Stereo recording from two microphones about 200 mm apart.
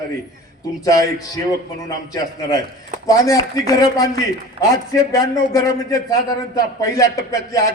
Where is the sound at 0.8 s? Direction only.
15° left (ahead or behind).